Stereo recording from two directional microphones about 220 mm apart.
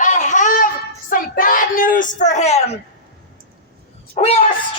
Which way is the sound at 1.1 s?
40° left (ahead or behind).